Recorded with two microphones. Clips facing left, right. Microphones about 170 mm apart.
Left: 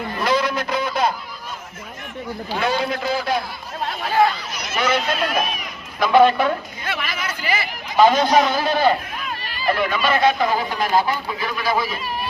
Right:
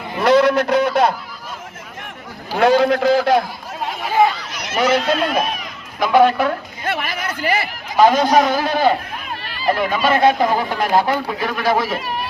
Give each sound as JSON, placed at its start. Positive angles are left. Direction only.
{"t": 0.2, "sound": "a sound", "side_deg": -65}
{"t": 2.6, "sound": "a man's voice", "side_deg": -75}
{"t": 3.8, "sound": "speech", "side_deg": -15}
{"t": 4.8, "sound": "speech", "side_deg": -30}
{"t": 6.0, "sound": "speech", "side_deg": -10}
{"t": 6.8, "sound": "speech", "side_deg": -50}
{"t": 7.9, "sound": "speech", "side_deg": -10}
{"t": 9.6, "sound": "speech", "side_deg": -35}
{"t": 10.8, "sound": "speech", "side_deg": -60}